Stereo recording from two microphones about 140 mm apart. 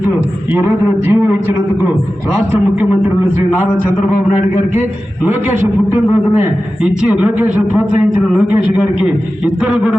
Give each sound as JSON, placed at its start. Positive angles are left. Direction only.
{"t": 0.6, "sound": "a man's voice", "side_deg": -15}
{"t": 5.2, "sound": "a man's voice", "side_deg": -15}
{"t": 8.7, "sound": "a man's voice", "side_deg": -10}